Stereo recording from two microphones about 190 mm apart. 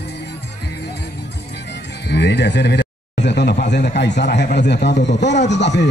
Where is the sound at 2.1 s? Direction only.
60° left (ahead or behind).